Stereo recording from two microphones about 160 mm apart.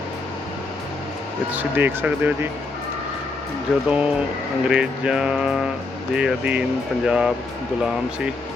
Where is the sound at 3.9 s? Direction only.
5° right (ahead or behind).